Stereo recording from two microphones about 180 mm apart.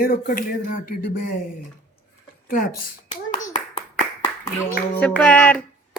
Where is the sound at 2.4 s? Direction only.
50° left (ahead or behind).